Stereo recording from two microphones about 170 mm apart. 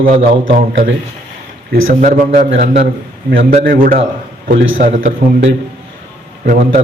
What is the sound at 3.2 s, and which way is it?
Speech, 55° right (ahead or behind).